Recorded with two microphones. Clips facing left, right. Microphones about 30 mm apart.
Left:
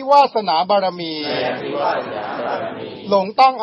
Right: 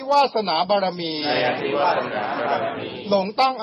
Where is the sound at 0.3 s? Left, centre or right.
Centre.